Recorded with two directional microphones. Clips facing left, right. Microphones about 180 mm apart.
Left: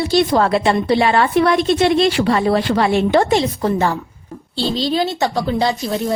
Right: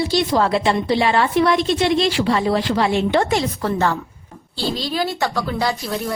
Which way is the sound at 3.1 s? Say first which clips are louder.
Left 4 dB; 30° left (ahead or behind).